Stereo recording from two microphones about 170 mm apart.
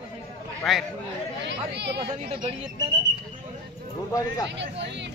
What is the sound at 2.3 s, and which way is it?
Speech, 30° right (ahead or behind).